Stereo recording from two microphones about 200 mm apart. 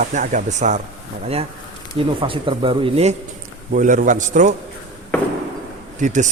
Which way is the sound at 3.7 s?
40° right (ahead or behind).